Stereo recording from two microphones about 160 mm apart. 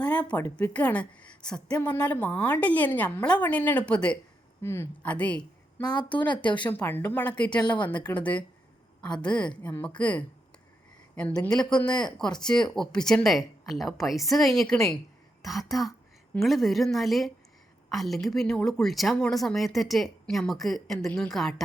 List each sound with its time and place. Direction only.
0.0 s a woman's voice: 10° left (ahead or behind)
5.8 s a woman's voice: 25° left (ahead or behind)
6.7 s a woman's voice: 15° left (ahead or behind)
7.5 s a woman's voice: 30° left (ahead or behind)
8.1 s a woman's voice: 10° left (ahead or behind)